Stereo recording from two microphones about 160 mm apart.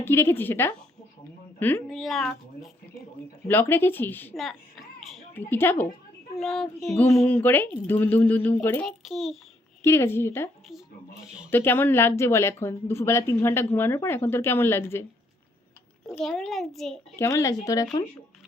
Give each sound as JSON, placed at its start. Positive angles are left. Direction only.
{"t": 0.0, "sound": "a woman's voice", "side_deg": 15}
{"t": 1.9, "sound": "a child's voice", "side_deg": 0}
{"t": 3.4, "sound": "speech", "side_deg": 15}
{"t": 5.5, "sound": "speech", "side_deg": 15}
{"t": 6.3, "sound": "a child's voice", "side_deg": 0}
{"t": 7.3, "sound": "speech", "side_deg": 10}
{"t": 8.9, "sound": "a child's voice", "side_deg": 0}
{"t": 9.8, "sound": "speech", "side_deg": 15}
{"t": 11.2, "sound": "a child's voice", "side_deg": -5}
{"t": 11.5, "sound": "speech", "side_deg": 15}
{"t": 16.1, "sound": "a child's voice", "side_deg": 5}
{"t": 17.2, "sound": "speech", "side_deg": 15}